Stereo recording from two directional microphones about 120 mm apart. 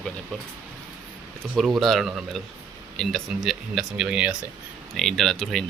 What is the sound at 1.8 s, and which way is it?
Speech, centre (ahead or behind).